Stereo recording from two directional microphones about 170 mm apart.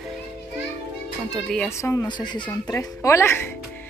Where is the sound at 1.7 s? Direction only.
15° left (ahead or behind).